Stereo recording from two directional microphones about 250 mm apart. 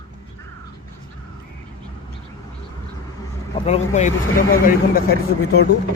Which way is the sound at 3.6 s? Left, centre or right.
Left.